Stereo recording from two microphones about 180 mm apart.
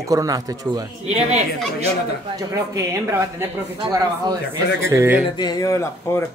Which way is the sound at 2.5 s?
15° right (ahead or behind).